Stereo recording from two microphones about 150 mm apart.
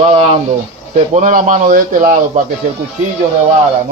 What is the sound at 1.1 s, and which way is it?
Speech, 60° right (ahead or behind).